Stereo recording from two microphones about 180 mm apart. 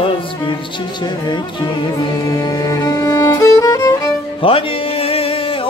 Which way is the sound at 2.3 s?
20° left (ahead or behind).